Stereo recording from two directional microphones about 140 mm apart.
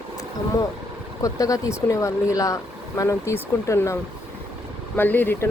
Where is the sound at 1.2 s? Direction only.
25° left (ahead or behind).